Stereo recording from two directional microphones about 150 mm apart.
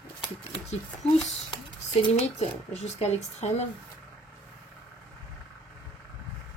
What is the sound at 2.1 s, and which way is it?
A woman's voice, 45° left (ahead or behind).